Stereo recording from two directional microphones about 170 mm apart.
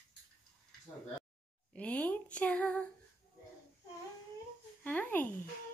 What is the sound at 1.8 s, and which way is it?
Speech, 10° left (ahead or behind).